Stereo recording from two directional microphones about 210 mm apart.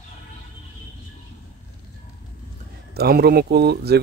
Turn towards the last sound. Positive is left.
turn(degrees=-50)  # may be behind; listen again after turning